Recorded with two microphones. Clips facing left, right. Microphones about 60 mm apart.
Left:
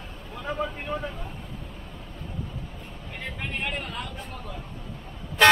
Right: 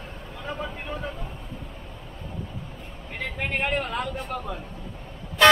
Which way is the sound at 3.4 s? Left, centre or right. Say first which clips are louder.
Right 6 dB; right.